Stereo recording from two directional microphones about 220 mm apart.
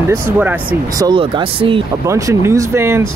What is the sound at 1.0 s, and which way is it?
Speech, 20° right (ahead or behind).